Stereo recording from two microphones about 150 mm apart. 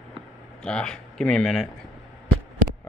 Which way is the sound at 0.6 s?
5° left (ahead or behind).